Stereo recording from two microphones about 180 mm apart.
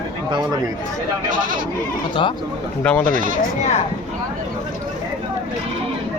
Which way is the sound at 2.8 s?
5° left (ahead or behind).